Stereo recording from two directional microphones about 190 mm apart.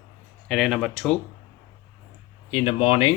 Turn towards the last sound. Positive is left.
turn(degrees=30)  # may be behind; listen again after turning